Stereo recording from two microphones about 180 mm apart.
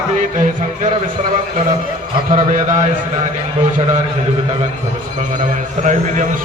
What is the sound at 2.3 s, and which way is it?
Speech, 45° right (ahead or behind).